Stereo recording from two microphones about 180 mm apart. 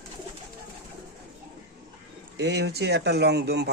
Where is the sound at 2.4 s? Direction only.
70° right (ahead or behind).